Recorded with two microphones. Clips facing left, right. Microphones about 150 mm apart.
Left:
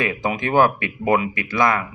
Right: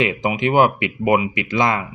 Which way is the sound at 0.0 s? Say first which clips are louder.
Right 3 dB; 20° right (ahead or behind).